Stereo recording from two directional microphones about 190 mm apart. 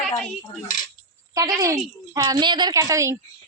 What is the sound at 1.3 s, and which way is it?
A woman's voice, 20° right (ahead or behind).